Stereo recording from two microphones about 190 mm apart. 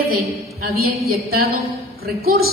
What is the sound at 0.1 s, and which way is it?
A woman's voice, 50° right (ahead or behind).